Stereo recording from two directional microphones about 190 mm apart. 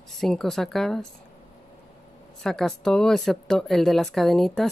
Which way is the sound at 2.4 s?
5° left (ahead or behind).